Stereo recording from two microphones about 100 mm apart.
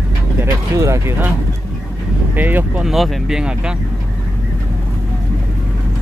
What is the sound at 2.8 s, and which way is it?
Speech, 5° right (ahead or behind).